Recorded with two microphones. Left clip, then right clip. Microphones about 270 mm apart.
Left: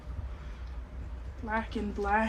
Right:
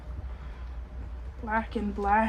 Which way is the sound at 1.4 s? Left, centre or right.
Right.